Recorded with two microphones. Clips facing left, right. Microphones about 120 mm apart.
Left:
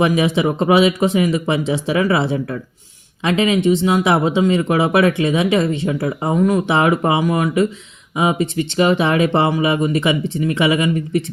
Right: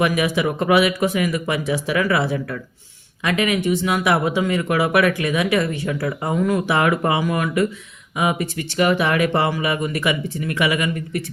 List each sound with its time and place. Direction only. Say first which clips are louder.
0.0 s speech: left 3 dB; 25° left (ahead or behind)